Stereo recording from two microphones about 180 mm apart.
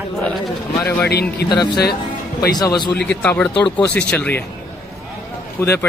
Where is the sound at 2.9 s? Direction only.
10° left (ahead or behind).